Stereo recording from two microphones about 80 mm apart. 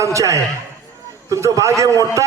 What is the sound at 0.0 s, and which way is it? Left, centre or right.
A man's voice, right.